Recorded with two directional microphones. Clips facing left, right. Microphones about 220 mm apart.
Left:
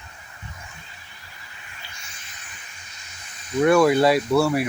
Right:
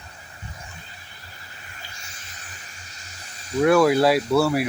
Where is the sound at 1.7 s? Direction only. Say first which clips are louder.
Right 1 dB; 40° right (ahead or behind).